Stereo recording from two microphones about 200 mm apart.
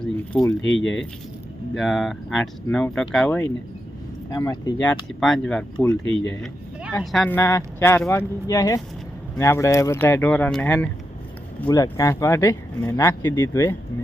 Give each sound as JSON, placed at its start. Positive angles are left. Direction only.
{"t": 0.6, "sound": "speech", "side_deg": 65}
{"t": 1.8, "sound": "speech", "side_deg": 0}
{"t": 5.9, "sound": "speech", "side_deg": 70}
{"t": 6.9, "sound": "speech", "side_deg": 0}
{"t": 11.7, "sound": "speech", "side_deg": 15}